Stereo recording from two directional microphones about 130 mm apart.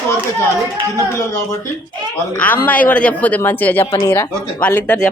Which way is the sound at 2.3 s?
10° left (ahead or behind).